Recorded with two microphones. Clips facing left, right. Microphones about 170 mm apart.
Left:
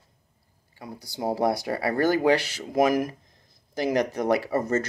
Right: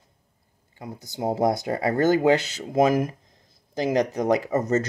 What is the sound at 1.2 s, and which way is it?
Speech, 20° right (ahead or behind).